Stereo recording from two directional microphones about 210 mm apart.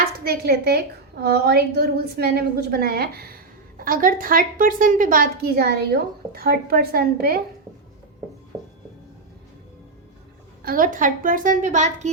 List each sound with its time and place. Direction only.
0.3 s a woman's voice: 50° right (ahead or behind)
10.6 s a woman's voice: 40° right (ahead or behind)